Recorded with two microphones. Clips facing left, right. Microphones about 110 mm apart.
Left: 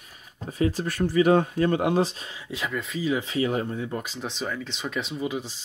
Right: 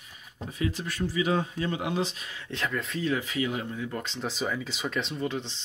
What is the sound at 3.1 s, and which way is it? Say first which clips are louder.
Speech: left 5 dB; 30° left (ahead or behind).